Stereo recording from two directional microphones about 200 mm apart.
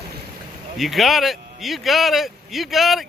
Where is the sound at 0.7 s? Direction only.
Centre (ahead or behind).